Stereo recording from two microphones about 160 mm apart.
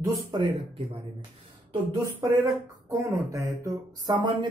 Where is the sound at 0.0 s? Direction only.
25° right (ahead or behind).